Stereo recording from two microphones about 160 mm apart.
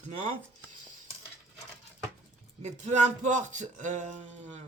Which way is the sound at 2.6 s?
45° right (ahead or behind).